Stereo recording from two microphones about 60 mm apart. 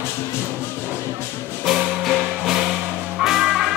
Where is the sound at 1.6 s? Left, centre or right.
Centre.